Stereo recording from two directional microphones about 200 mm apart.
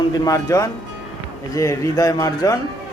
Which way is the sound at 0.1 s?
15° left (ahead or behind).